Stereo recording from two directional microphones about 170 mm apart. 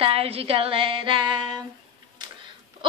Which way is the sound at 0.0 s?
35° right (ahead or behind).